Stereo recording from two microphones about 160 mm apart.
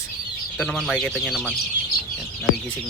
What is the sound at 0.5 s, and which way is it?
Speech, 5° left (ahead or behind).